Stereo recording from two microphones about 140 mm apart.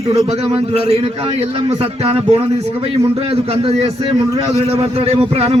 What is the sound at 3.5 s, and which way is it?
A man's voice, 45° right (ahead or behind).